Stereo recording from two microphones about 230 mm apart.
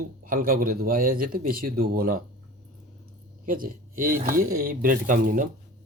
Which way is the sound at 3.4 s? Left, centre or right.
Right.